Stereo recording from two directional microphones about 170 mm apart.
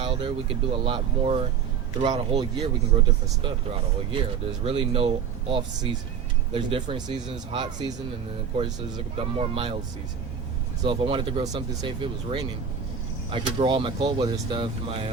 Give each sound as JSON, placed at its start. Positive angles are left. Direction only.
{"t": 0.0, "sound": "speech", "side_deg": -30}
{"t": 4.1, "sound": "speech", "side_deg": -30}
{"t": 10.8, "sound": "speech", "side_deg": -30}